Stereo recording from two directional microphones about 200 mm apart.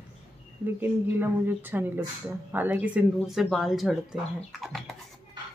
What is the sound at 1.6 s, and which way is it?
Speech, 10° right (ahead or behind).